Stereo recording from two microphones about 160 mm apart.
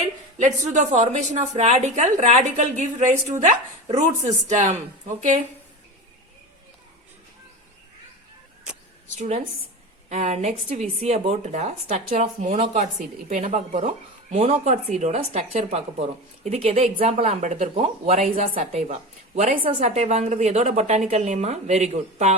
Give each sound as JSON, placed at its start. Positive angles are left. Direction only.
{"t": 0.3, "sound": "speech", "side_deg": -50}
{"t": 9.1, "sound": "speech", "side_deg": -40}
{"t": 18.2, "sound": "speech", "side_deg": -55}
{"t": 18.7, "sound": "a woman's voice", "side_deg": -40}